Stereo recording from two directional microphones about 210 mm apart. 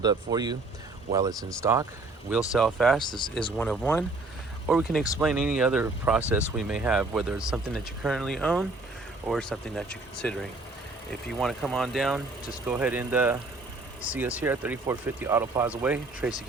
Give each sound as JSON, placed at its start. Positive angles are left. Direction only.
{"t": 0.0, "sound": "speech", "side_deg": -20}
{"t": 2.5, "sound": "speech", "side_deg": 0}
{"t": 3.1, "sound": "speech", "side_deg": 20}
{"t": 3.6, "sound": "speech", "side_deg": 5}